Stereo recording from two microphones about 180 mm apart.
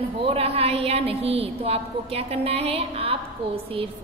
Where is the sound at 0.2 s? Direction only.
35° right (ahead or behind).